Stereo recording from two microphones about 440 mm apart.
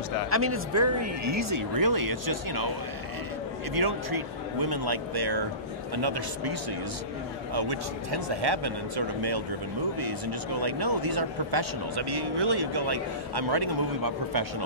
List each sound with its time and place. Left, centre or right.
0.3 s speech: right
3.8 s a man's voice: right
7.5 s speech: right
9.9 s a man's voice: right